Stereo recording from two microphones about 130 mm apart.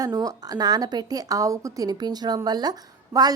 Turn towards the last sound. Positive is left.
turn(degrees=-30)  # may be behind; listen again after turning